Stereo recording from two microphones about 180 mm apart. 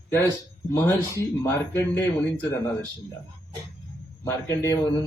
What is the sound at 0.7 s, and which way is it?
A man's voice, 15° left (ahead or behind).